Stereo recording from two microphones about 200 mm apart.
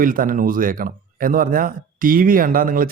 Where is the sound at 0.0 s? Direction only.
45° right (ahead or behind).